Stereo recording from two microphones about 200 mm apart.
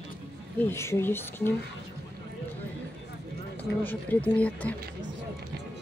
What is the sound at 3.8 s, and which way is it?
Speech, 10° left (ahead or behind).